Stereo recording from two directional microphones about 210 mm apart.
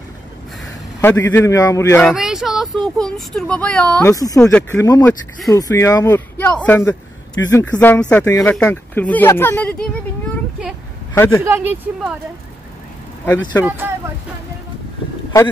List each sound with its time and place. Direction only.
1.0 s speech: 10° left (ahead or behind)
2.0 s speech: centre (ahead or behind)
4.1 s speech: 15° left (ahead or behind)
4.4 s speech: 5° left (ahead or behind)
8.3 s speech: 15° left (ahead or behind)
11.1 s speech: 10° left (ahead or behind)
11.4 s speech: 10° right (ahead or behind)
13.2 s speech: 10° left (ahead or behind)
13.7 s speech: 10° right (ahead or behind)